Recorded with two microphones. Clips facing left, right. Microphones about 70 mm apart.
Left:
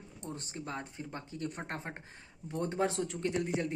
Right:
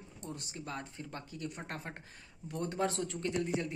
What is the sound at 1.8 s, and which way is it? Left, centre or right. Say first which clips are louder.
A man's voice: left 2 dB; left.